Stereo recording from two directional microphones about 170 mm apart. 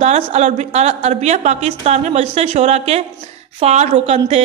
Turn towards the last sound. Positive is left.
turn(degrees=-35)  # may be behind; listen again after turning